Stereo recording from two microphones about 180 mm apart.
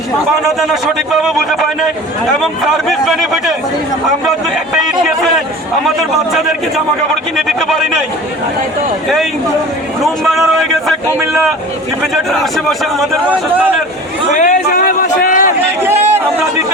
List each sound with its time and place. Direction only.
0.4 s a man's voice: centre (ahead or behind)
7.3 s a man's voice: centre (ahead or behind)
10.0 s a man's voice: centre (ahead or behind)
12.1 s a man's voice: centre (ahead or behind)
14.3 s a sound: 45° left (ahead or behind)
15.8 s chatter: 15° right (ahead or behind)